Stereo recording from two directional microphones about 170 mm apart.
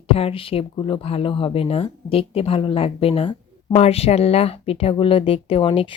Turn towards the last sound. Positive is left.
turn(degrees=30)  # may be behind; listen again after turning